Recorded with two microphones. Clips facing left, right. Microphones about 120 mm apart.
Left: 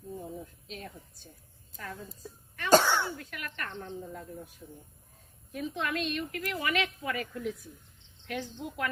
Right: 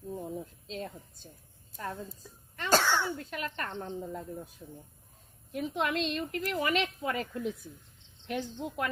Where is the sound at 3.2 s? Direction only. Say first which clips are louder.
Right 4 dB; 25° right (ahead or behind).